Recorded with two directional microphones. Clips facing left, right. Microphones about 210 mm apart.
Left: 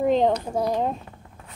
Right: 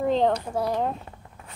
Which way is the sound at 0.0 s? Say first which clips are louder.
Left 2 dB; 15° left (ahead or behind).